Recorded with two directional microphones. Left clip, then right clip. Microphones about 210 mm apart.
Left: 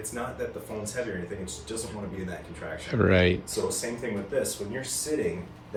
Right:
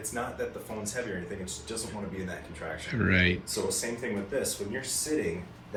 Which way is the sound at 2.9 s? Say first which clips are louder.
Left 4 dB; 20° left (ahead or behind).